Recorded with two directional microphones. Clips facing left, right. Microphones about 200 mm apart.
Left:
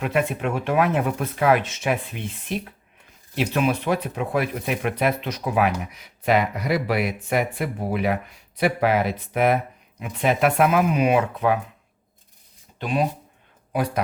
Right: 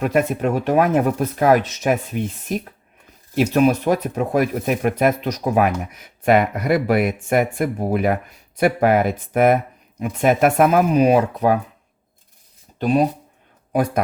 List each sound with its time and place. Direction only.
0.0 s speech: 45° right (ahead or behind)
12.8 s speech: 40° right (ahead or behind)